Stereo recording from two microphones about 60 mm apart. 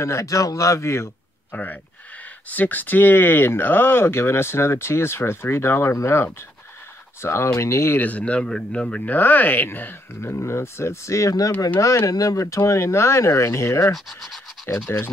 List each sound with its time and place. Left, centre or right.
0.0 s speech: left
1.5 s speech: left
8.0 s speech: left
8.4 s a man's voice: centre
8.8 s speech: left
9.1 s speech: left
10.2 s speech: left
13.9 s speech: centre
14.7 s speech: left